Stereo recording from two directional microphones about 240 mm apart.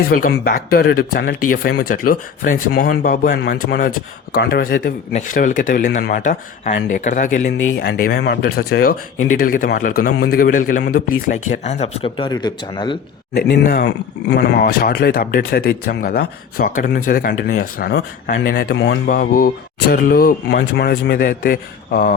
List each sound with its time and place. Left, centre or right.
0.2 s a man's voice: left; by 13.0 s centre
13.3 s a man's voice: left